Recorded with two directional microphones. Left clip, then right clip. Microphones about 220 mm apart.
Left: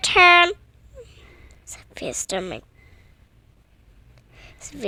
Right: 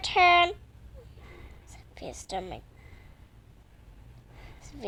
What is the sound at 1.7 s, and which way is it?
Speech, 45° left (ahead or behind).